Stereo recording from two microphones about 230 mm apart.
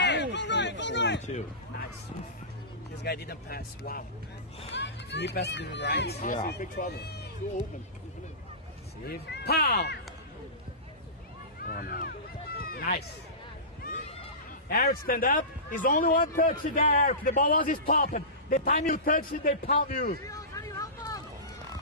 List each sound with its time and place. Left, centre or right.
0.0 s a sound: left
3.0 s speech: left
9.0 s speech: left
11.6 s a sound: left
12.6 s run: left
14.7 s a man's voice: left
20.2 s vehicle: centre